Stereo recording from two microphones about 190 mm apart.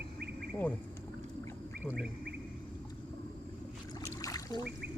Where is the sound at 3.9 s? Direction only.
20° left (ahead or behind).